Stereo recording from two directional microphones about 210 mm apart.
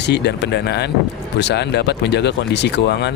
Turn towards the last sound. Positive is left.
turn(degrees=55)  # may be behind; listen again after turning